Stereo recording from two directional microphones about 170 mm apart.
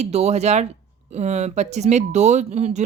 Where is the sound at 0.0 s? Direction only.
40° right (ahead or behind).